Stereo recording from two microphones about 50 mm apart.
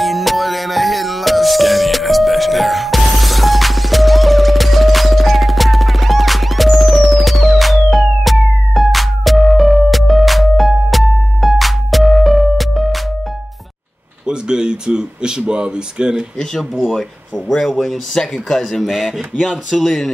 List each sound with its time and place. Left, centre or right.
0.0 s music: centre
14.2 s speech: centre
17.5 s speech: centre
18.6 s speech: centre